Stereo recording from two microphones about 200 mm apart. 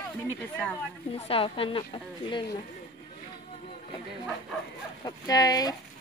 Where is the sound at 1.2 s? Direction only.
25° left (ahead or behind).